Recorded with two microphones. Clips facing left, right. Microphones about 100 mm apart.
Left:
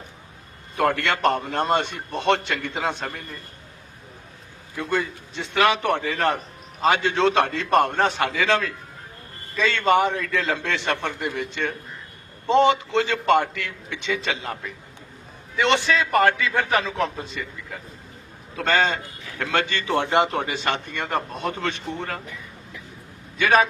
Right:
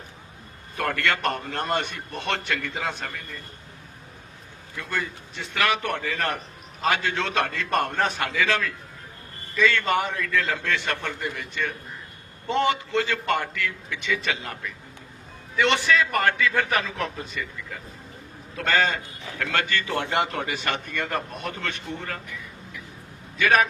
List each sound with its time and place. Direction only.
0.8 s a man's voice: 25° left (ahead or behind)
4.8 s a man's voice: 25° left (ahead or behind)
18.5 s a man's voice: 25° left (ahead or behind)